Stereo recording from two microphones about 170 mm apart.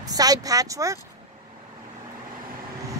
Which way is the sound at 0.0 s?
20° right (ahead or behind).